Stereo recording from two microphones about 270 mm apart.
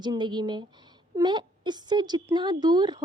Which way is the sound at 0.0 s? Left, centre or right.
Centre.